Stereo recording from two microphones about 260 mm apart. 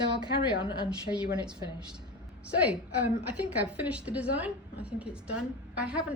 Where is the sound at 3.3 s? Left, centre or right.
Centre.